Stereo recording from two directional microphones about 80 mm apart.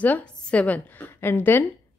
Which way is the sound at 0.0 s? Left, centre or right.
Centre.